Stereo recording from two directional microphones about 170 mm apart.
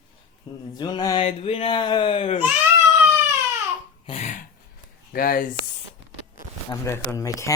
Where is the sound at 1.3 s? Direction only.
35° left (ahead or behind).